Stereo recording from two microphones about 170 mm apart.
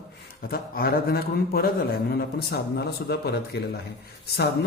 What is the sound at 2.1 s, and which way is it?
A man's voice, 75° left (ahead or behind).